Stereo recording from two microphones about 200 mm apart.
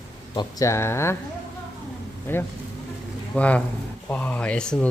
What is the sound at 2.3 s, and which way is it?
Speech, 10° left (ahead or behind).